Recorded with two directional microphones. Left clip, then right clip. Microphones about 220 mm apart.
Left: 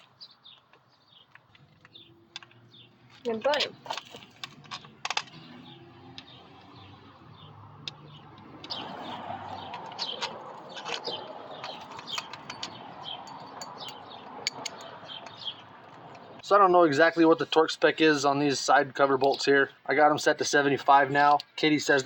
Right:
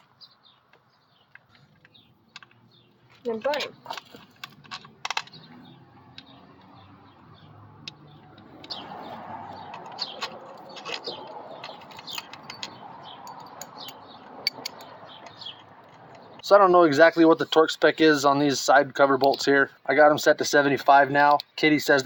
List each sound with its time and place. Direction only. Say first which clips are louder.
3.2 s speech: even; 10° right (ahead or behind)
16.4 s speech: right 4 dB; 45° right (ahead or behind)